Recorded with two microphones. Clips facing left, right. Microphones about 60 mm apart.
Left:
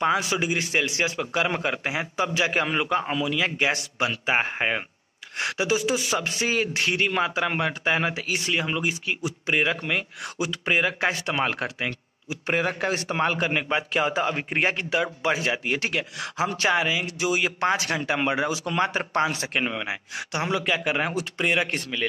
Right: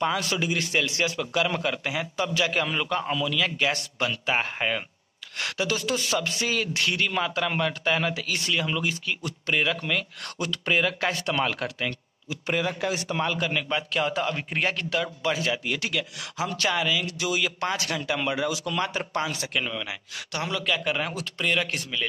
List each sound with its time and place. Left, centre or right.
0.0 s a man's voice: centre
13.7 s a man's voice: centre